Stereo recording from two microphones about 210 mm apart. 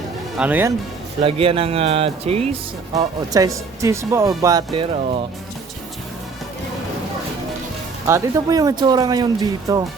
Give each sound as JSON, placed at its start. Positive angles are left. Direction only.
{"t": 0.3, "sound": "speech", "side_deg": -10}
{"t": 1.2, "sound": "speech", "side_deg": -25}
{"t": 2.9, "sound": "speech", "side_deg": -15}
{"t": 8.0, "sound": "speech", "side_deg": -15}